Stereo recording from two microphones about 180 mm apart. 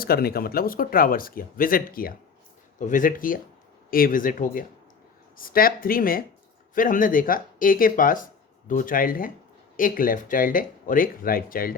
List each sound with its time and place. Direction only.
0.0 s speech: 60° left (ahead or behind)